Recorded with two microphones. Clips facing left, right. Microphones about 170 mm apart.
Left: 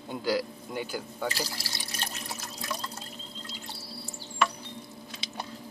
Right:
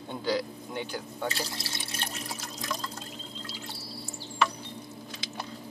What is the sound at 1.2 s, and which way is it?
Speech, 25° right (ahead or behind).